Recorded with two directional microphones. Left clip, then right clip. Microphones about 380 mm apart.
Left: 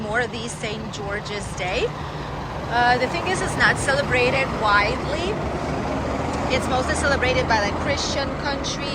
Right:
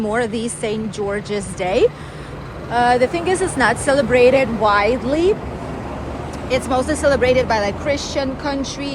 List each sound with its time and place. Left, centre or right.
0.1 s speech: centre
6.5 s speech: centre